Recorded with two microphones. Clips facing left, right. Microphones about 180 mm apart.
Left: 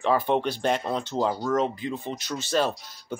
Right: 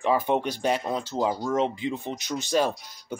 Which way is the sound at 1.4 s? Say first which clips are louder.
Even; 20° right (ahead or behind).